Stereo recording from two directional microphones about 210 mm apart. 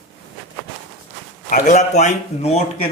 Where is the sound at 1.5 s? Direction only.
40° left (ahead or behind).